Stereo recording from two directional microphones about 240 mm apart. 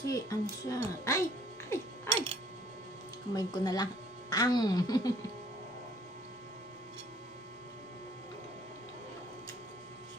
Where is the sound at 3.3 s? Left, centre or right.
Centre.